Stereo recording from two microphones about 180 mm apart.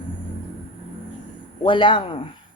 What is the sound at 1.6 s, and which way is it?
Speech, 25° left (ahead or behind).